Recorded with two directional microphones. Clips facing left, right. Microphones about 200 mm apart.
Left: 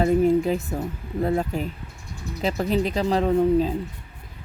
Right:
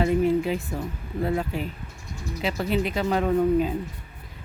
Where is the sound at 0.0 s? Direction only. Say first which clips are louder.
Left 3 dB; 40° left (ahead or behind).